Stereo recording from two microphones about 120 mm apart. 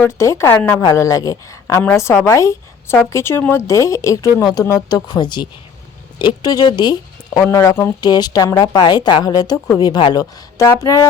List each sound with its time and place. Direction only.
0.0 s a man's voice: 25° left (ahead or behind)
0.8 s a man's voice: 25° left (ahead or behind)
7.5 s a man's voice: 25° left (ahead or behind)
8.0 s a woman's voice: 35° left (ahead or behind)